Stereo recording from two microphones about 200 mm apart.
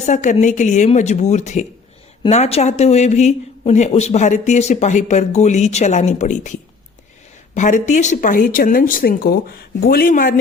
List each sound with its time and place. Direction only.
0.0 s speech: 35° left (ahead or behind)